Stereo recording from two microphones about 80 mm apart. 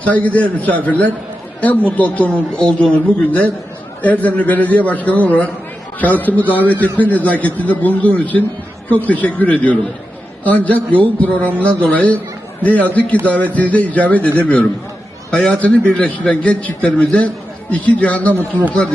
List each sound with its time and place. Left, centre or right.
0.0 s a man's voice: centre
15.3 s a man's voice: centre